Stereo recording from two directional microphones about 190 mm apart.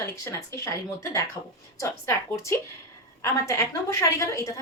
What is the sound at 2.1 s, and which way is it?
A woman's voice, 15° left (ahead or behind).